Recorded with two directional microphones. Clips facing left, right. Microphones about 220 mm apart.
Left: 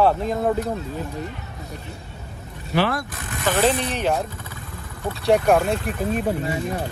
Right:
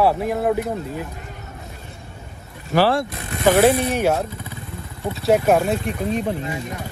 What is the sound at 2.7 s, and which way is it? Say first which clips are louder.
Speech: right 4 dB; 30° right (ahead or behind).